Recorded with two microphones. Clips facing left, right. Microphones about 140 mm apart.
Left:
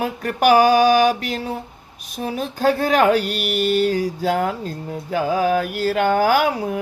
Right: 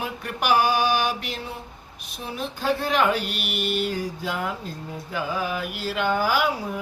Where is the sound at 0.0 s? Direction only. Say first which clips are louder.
Left 10 dB; 50° left (ahead or behind).